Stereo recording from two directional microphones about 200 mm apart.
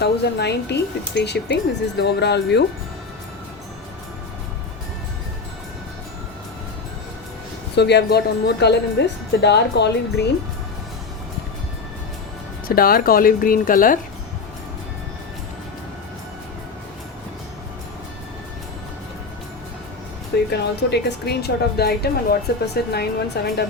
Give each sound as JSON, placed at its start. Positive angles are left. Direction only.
{"t": 0.0, "sound": "a woman's voice", "side_deg": 55}
{"t": 7.8, "sound": "a woman's voice", "side_deg": 55}
{"t": 12.6, "sound": "a woman's voice", "side_deg": 45}
{"t": 20.5, "sound": "a woman's voice", "side_deg": 55}